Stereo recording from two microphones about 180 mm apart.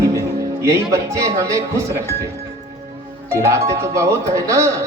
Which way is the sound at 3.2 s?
15° right (ahead or behind).